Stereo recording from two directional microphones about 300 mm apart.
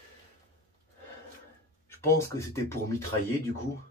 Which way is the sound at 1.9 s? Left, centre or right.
Centre.